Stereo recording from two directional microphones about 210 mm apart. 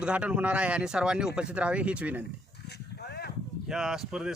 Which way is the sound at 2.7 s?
50° left (ahead or behind).